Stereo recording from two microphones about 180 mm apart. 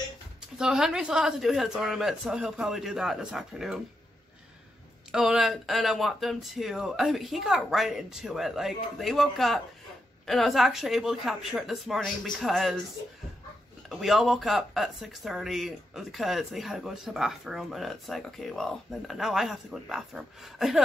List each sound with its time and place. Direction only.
0.6 s speech: 5° right (ahead or behind)
5.1 s speech: 5° right (ahead or behind)
13.8 s speech: centre (ahead or behind)